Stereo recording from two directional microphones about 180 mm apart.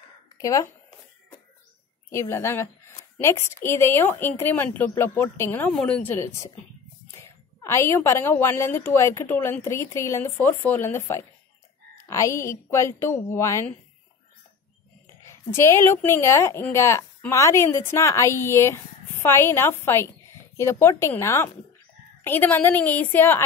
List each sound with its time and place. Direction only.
0.4 s speech: 20° left (ahead or behind)
2.0 s a woman's voice: 15° left (ahead or behind)
15.0 s a woman's voice: 15° left (ahead or behind)